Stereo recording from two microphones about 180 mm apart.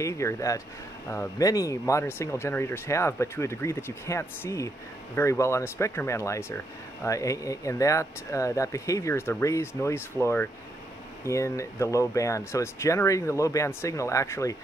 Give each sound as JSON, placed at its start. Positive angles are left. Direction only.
{"t": 0.0, "sound": "speech", "side_deg": 15}